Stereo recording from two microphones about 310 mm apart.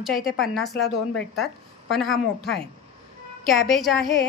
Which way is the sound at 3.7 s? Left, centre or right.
Centre.